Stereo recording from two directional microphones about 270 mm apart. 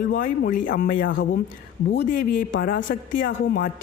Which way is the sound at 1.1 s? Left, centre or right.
Left.